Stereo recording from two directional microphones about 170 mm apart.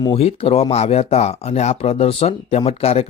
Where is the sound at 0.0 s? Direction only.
35° left (ahead or behind).